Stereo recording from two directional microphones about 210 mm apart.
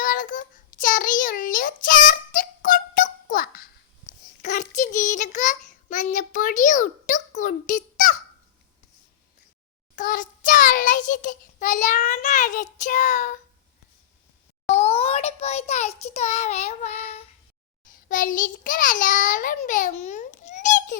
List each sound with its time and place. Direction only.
0.0 s child singing: 40° left (ahead or behind)
9.9 s child singing: 40° left (ahead or behind)
14.7 s a sound: 30° left (ahead or behind)
18.1 s child singing: 40° left (ahead or behind)